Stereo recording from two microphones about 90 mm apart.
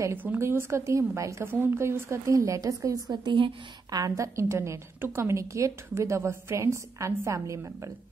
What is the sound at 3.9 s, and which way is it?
A woman's voice, 40° right (ahead or behind).